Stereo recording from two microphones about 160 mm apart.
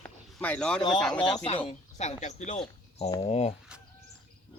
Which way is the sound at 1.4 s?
35° left (ahead or behind).